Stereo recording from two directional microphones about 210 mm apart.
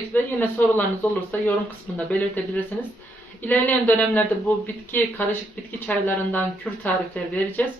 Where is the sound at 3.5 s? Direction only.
10° left (ahead or behind).